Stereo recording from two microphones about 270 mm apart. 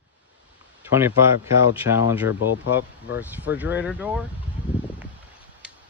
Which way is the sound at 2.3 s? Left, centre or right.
Left.